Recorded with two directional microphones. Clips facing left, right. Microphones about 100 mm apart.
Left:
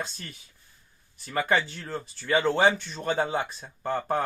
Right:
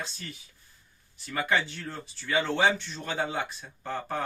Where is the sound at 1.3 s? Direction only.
40° left (ahead or behind).